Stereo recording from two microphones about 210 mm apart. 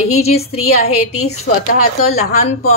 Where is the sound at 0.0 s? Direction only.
30° left (ahead or behind).